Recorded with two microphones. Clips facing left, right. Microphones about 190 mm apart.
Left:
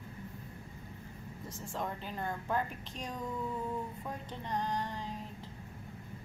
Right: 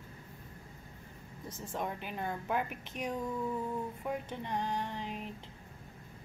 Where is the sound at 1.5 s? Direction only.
15° right (ahead or behind).